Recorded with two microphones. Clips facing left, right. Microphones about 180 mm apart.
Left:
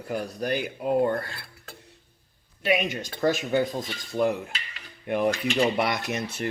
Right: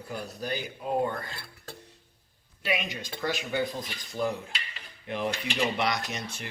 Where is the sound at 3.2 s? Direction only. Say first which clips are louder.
Left 7 dB; 45° left (ahead or behind).